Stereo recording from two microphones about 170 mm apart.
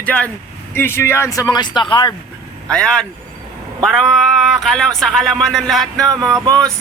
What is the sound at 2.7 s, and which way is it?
Speech, 5° left (ahead or behind).